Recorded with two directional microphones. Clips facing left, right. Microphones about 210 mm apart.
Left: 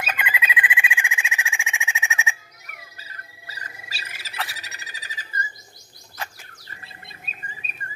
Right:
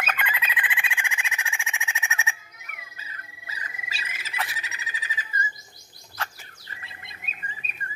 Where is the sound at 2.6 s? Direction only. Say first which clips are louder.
Left 1 dB; 35° left (ahead or behind).